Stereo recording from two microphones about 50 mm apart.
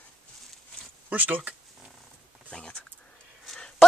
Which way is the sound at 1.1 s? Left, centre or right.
Right.